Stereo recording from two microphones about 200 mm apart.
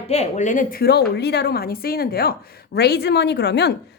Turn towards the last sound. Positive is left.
turn(degrees=55)  # may be behind; listen again after turning